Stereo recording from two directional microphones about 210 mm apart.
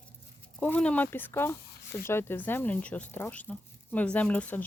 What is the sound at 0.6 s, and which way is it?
Speech, 5° left (ahead or behind).